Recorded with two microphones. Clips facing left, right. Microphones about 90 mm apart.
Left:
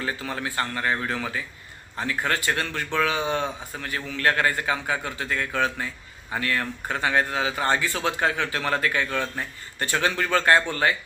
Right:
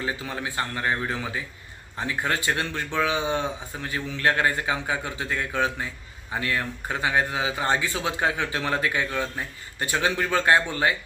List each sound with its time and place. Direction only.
0.0 s speech: 20° right (ahead or behind)